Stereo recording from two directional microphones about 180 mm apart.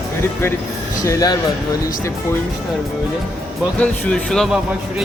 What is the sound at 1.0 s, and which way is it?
Speech, 20° left (ahead or behind).